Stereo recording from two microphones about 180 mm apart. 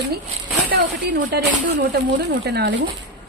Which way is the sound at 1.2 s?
50° right (ahead or behind).